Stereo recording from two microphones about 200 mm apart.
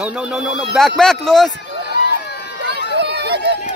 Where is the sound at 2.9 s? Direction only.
55° right (ahead or behind).